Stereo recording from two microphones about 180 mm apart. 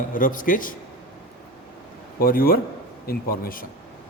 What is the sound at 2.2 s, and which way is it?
A man's voice, 55° left (ahead or behind).